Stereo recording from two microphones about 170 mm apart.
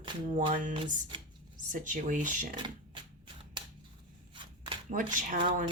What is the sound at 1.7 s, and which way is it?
Speech, 50° right (ahead or behind).